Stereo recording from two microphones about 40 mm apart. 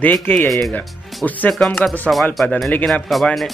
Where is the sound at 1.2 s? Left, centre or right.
Left.